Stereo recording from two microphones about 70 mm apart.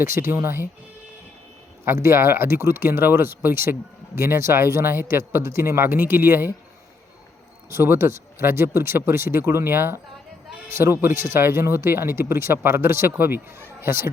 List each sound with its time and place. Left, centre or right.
0.0 s speech: right
1.8 s speech: right
7.7 s speech: right